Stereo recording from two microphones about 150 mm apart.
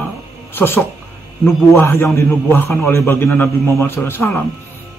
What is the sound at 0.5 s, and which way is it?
A man's voice, 15° left (ahead or behind).